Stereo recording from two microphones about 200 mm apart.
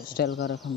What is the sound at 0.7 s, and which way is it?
Speech, 65° left (ahead or behind).